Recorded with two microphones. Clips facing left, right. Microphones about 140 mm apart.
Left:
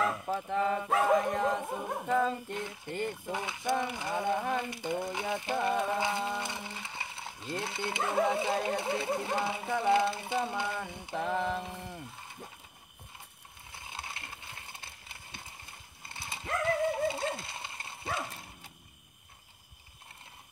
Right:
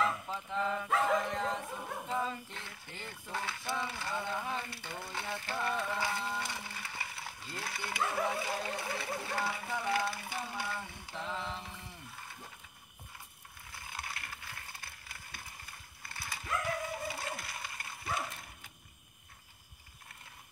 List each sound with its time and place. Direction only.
0.4 s speech: 55° left (ahead or behind)
3.1 s speech: 20° left (ahead or behind)
3.8 s a sound: 20° left (ahead or behind)
4.1 s speech: 50° left (ahead or behind)
4.6 s speech: 20° left (ahead or behind)
5.0 s a sound: 20° left (ahead or behind)
8.6 s speech: 25° left (ahead or behind)
9.8 s a sound: 25° left (ahead or behind)
11.1 s mantra: 55° left (ahead or behind)
13.7 s ratchet: 25° left (ahead or behind)
16.6 s dog: 25° left (ahead or behind)